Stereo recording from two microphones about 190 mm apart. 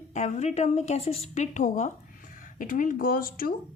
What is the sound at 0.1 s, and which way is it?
A woman's voice, 35° left (ahead or behind).